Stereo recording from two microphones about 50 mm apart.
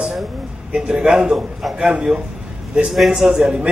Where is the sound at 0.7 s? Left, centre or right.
Centre.